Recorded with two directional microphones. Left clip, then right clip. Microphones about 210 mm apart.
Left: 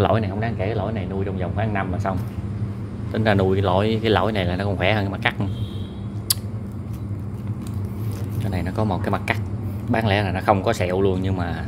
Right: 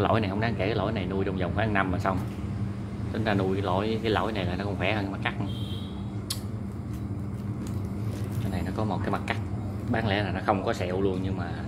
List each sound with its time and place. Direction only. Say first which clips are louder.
0.1 s speech: left 4 dB; 5° left (ahead or behind)
3.1 s speech: left 8 dB; 25° left (ahead or behind)
8.5 s speech: left 7 dB; 30° left (ahead or behind)